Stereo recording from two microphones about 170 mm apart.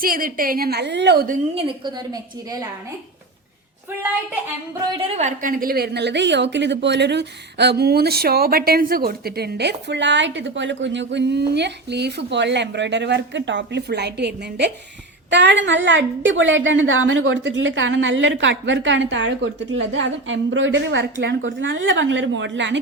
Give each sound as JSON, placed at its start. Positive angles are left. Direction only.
{"t": 0.0, "sound": "a woman's voice", "side_deg": -55}
{"t": 1.5, "sound": "a woman's voice", "side_deg": -30}
{"t": 4.9, "sound": "a woman's voice", "side_deg": -40}
{"t": 15.3, "sound": "a woman's voice", "side_deg": -90}